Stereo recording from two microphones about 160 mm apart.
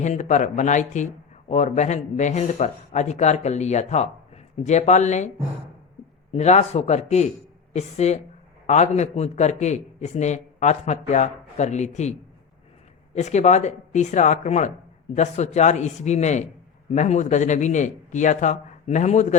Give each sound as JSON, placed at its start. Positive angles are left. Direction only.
{"t": 0.0, "sound": "a man's voice", "side_deg": 50}
{"t": 6.3, "sound": "a man's voice", "side_deg": 45}
{"t": 13.1, "sound": "a man's voice", "side_deg": 45}